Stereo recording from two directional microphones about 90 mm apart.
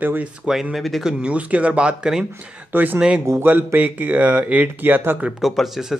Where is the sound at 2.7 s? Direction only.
20° right (ahead or behind).